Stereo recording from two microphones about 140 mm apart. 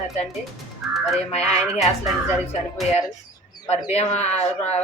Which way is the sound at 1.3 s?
50° left (ahead or behind).